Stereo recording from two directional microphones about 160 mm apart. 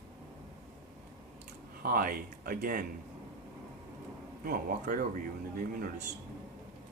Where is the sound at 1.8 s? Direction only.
65° right (ahead or behind).